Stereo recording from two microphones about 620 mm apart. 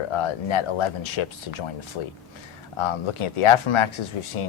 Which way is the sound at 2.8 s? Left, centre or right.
Left.